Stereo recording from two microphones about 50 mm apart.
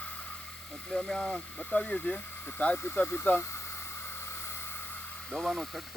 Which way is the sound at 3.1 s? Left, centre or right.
Left.